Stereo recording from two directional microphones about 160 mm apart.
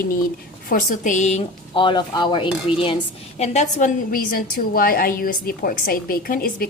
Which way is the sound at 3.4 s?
45° left (ahead or behind).